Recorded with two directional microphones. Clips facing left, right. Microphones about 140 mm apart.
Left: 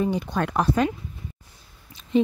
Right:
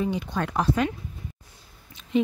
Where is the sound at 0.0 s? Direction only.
45° left (ahead or behind).